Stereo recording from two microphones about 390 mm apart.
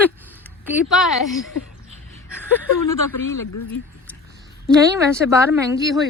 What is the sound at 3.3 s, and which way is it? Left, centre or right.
Speech, left.